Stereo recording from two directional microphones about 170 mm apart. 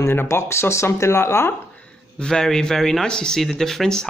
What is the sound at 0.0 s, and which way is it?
Speech, 15° left (ahead or behind).